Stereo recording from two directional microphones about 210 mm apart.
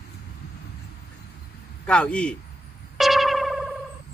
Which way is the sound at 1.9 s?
5° left (ahead or behind).